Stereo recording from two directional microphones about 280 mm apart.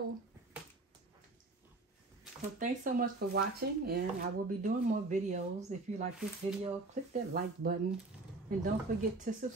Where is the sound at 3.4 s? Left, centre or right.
Right.